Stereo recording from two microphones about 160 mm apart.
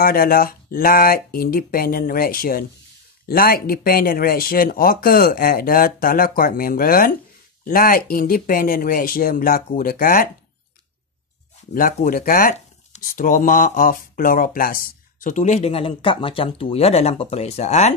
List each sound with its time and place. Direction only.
0.0 s speech: 65° left (ahead or behind)
11.7 s speech: 60° left (ahead or behind); by 17.9 s 45° left (ahead or behind)